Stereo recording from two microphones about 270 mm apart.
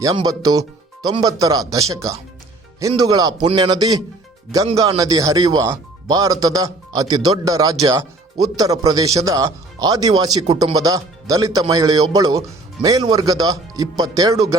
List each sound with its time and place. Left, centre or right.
0.0 s speech: centre